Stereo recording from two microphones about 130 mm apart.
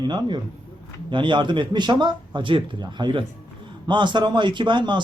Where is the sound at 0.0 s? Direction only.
35° right (ahead or behind).